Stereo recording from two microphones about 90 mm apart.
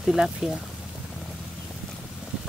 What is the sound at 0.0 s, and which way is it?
Speech, 5° right (ahead or behind).